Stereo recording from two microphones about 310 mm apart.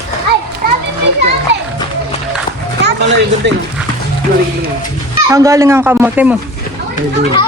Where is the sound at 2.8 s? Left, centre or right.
Right.